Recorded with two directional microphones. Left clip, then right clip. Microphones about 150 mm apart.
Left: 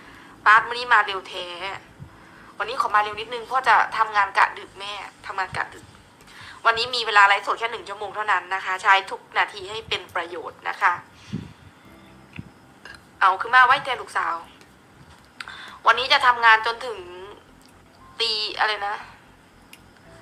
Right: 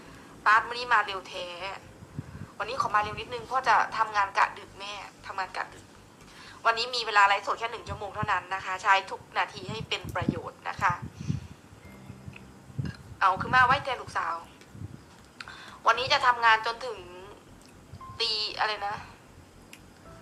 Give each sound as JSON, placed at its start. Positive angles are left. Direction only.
{"t": 0.0, "sound": "a sound", "side_deg": 25}
{"t": 0.7, "sound": "a woman's voice", "side_deg": 20}
{"t": 9.0, "sound": "a woman's voice", "side_deg": 15}
{"t": 13.3, "sound": "a woman's voice", "side_deg": 15}
{"t": 14.1, "sound": "a woman's voice", "side_deg": 30}
{"t": 15.4, "sound": "a sound", "side_deg": 20}
{"t": 16.0, "sound": "a woman's voice", "side_deg": 15}